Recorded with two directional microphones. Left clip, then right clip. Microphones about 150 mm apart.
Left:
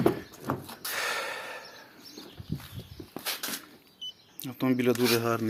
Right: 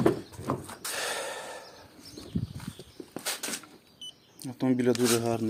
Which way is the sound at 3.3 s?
25° right (ahead or behind).